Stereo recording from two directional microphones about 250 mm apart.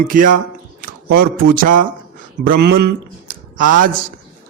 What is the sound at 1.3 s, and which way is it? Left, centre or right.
A man's voice, right.